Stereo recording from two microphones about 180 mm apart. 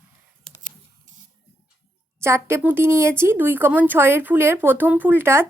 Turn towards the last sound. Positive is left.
turn(degrees=-15)  # may be behind; listen again after turning